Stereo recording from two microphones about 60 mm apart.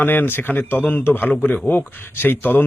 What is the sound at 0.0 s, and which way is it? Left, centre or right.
Speech, left.